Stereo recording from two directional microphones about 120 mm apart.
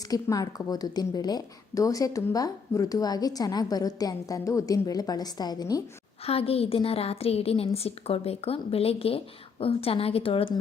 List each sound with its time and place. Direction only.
0.1 s a woman's voice: 30° left (ahead or behind)
6.2 s a woman's voice: 55° left (ahead or behind)